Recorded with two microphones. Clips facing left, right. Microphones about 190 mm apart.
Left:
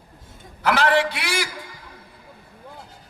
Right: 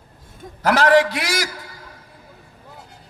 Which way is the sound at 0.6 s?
40° right (ahead or behind).